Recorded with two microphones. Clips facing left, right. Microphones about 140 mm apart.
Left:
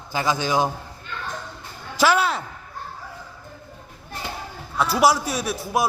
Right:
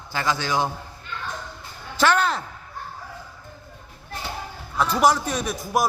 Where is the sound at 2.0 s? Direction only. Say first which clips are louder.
Left 1 dB; 5° left (ahead or behind).